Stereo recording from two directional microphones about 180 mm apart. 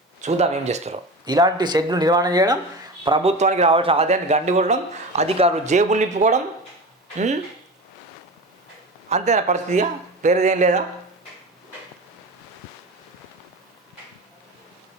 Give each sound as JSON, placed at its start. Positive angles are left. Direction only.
{"t": 0.2, "sound": "speech", "side_deg": -40}
{"t": 1.2, "sound": "speech", "side_deg": -25}
{"t": 3.3, "sound": "speech", "side_deg": -40}
{"t": 9.0, "sound": "speech", "side_deg": -40}